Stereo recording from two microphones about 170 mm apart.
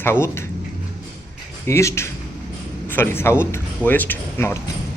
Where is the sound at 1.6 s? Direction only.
15° left (ahead or behind).